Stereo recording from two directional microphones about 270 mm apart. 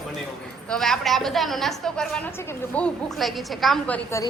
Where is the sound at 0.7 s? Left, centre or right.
Centre.